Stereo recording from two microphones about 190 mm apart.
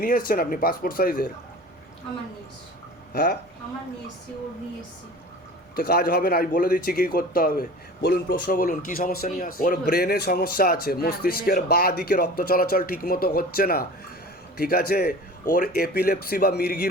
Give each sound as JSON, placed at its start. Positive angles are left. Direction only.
{"t": 0.0, "sound": "speech", "side_deg": 45}
{"t": 3.1, "sound": "speech", "side_deg": 50}
{"t": 5.7, "sound": "speech", "side_deg": 50}